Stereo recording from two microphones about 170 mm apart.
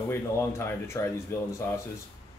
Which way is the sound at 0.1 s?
15° left (ahead or behind).